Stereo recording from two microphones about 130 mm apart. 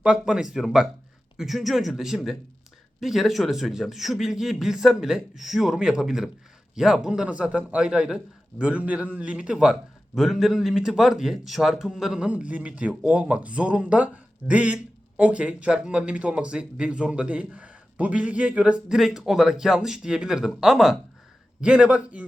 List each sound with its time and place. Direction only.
0.0 s a man's voice: 5° right (ahead or behind)